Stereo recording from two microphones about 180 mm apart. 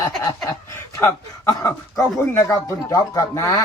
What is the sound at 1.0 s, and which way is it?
Speech, 15° left (ahead or behind).